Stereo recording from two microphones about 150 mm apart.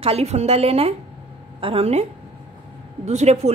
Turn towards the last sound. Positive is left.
turn(degrees=-45)  # may be behind; listen again after turning